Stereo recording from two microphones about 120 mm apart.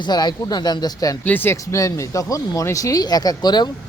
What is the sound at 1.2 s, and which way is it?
A man's voice, 15° left (ahead or behind).